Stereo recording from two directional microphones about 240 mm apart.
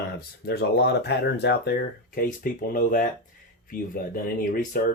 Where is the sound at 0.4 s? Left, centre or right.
Left.